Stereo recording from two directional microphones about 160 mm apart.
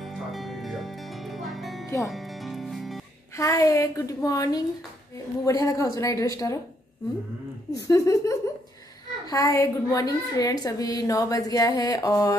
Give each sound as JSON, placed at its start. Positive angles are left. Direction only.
{"t": 0.3, "sound": "music", "side_deg": 0}
{"t": 3.3, "sound": "a woman's voice", "side_deg": 20}
{"t": 7.8, "sound": "a woman's voice", "side_deg": 20}